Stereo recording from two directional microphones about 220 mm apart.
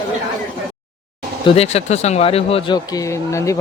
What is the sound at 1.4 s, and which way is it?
Speech, 30° left (ahead or behind).